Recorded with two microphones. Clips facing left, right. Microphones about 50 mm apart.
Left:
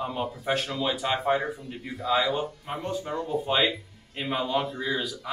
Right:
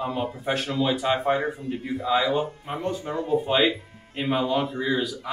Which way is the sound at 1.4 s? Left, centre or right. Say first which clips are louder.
Right 5 dB; right.